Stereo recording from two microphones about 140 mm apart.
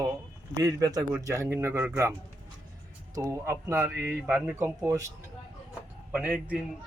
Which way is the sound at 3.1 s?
20° right (ahead or behind).